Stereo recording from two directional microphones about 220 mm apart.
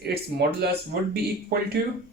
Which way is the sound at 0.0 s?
45° right (ahead or behind).